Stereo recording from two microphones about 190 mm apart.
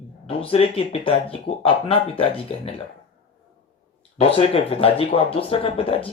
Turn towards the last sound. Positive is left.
turn(degrees=30)  # may be behind; listen again after turning